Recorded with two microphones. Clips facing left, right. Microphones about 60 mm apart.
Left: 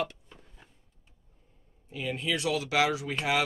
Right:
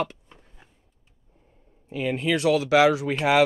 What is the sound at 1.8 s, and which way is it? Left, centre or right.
Speech, right.